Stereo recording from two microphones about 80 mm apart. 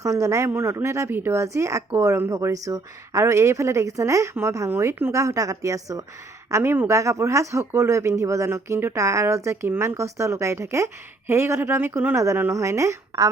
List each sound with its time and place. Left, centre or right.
0.0 s speech: right
5.1 s a woman's voice: right
6.5 s speech: right